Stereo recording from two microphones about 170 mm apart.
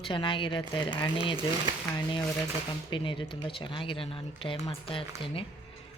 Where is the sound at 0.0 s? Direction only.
30° left (ahead or behind).